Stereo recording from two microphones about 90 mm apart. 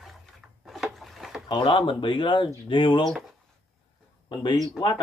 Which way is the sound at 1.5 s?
65° left (ahead or behind).